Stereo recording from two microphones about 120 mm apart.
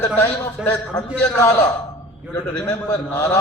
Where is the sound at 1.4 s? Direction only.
20° left (ahead or behind).